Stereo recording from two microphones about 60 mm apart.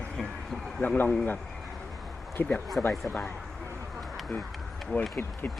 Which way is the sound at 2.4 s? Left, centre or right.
Left.